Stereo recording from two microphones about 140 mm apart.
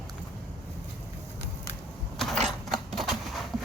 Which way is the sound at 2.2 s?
Centre (ahead or behind).